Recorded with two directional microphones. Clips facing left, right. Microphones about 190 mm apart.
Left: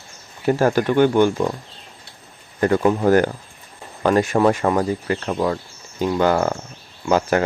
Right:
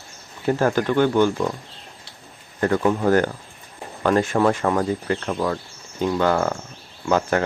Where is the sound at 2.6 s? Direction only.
15° left (ahead or behind).